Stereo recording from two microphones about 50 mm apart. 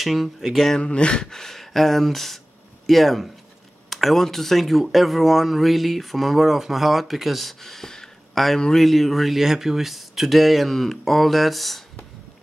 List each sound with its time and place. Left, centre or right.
0.0 s speech: centre
0.7 s speech: left
1.2 s a man's voice: centre
8.8 s speech: centre